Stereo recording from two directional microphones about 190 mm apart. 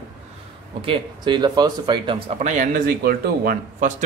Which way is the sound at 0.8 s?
25° right (ahead or behind).